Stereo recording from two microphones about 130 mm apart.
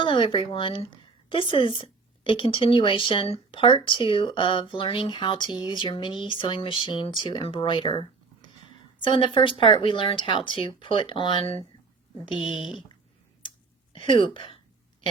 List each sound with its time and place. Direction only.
0.0 s speech: 40° left (ahead or behind)
12.5 s speech: 5° right (ahead or behind)
13.9 s speech: 40° left (ahead or behind)